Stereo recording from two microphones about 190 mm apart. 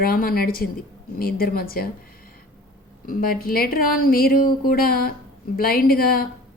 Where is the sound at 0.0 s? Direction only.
50° left (ahead or behind).